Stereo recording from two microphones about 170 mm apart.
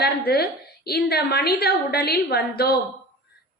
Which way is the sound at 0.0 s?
70° left (ahead or behind).